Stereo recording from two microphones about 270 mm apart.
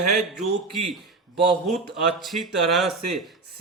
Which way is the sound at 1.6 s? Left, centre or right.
Centre.